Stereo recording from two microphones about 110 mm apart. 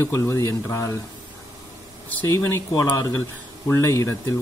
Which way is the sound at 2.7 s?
35° left (ahead or behind).